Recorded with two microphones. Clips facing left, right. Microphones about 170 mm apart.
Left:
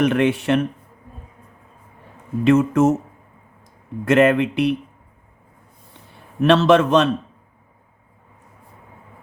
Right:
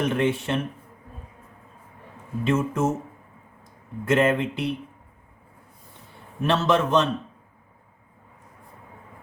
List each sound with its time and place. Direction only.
0.0 s speech: 75° left (ahead or behind)
2.4 s speech: 75° left (ahead or behind)
4.0 s speech: 75° left (ahead or behind)
6.4 s speech: 75° left (ahead or behind)